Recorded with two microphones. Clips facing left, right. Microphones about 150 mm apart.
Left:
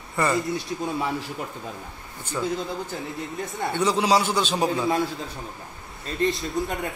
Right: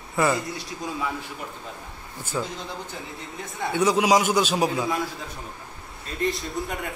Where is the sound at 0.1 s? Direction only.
Centre (ahead or behind).